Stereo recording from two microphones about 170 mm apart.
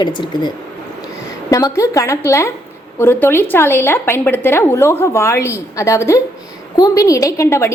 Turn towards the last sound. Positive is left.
turn(degrees=15)  # may be behind; listen again after turning